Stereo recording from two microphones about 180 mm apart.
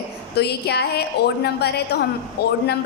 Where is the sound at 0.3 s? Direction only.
65° left (ahead or behind).